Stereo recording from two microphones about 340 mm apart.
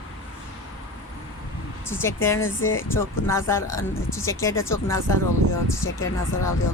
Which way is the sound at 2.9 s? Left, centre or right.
Centre.